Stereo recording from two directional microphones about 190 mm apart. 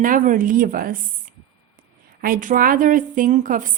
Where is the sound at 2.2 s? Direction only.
45° right (ahead or behind).